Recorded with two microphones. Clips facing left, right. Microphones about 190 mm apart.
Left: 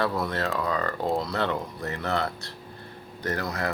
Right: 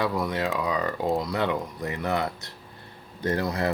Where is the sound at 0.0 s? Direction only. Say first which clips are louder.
Right 1 dB; 15° right (ahead or behind).